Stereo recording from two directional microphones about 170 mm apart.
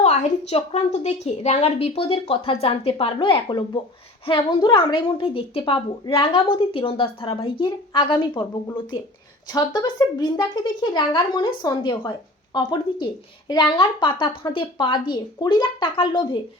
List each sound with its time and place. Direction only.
0.0 s a woman's voice: 40° left (ahead or behind)